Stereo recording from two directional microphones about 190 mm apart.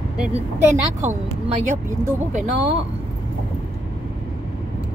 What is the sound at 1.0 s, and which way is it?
Speech, 40° right (ahead or behind).